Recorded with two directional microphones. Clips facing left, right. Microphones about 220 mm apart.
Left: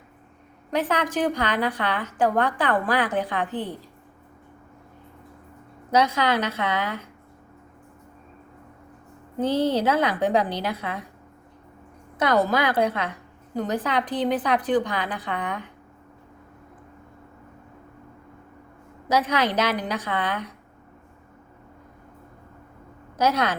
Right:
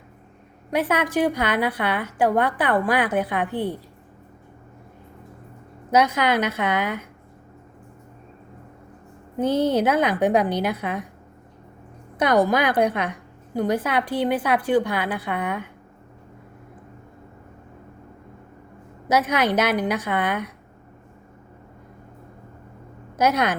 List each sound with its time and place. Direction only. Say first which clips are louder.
0.7 s a woman's voice: right 2 dB; 10° right (ahead or behind)
6.1 s a woman's voice: right 2 dB; 10° right (ahead or behind)
9.4 s a woman's voice: right 2 dB; 10° right (ahead or behind)
12.2 s a woman's voice: right 2 dB; 15° right (ahead or behind)
19.0 s a woman's voice: right 2 dB; 10° right (ahead or behind)
23.2 s a woman's voice: right 2 dB; 10° right (ahead or behind)